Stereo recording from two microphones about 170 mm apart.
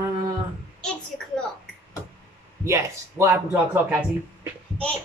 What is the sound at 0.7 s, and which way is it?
Speech, 5° left (ahead or behind).